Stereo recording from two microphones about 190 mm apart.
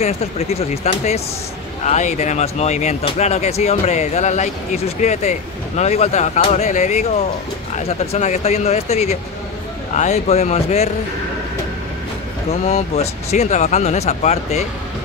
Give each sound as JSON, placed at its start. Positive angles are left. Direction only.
{"t": 0.0, "sound": "speech", "side_deg": 35}
{"t": 8.1, "sound": "speech", "side_deg": 35}
{"t": 12.6, "sound": "speech", "side_deg": 35}